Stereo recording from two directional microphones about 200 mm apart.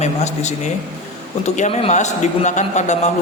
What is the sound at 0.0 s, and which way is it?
A man's voice, 35° left (ahead or behind).